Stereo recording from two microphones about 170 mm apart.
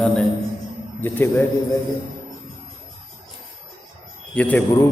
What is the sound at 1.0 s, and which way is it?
Speech, 10° left (ahead or behind).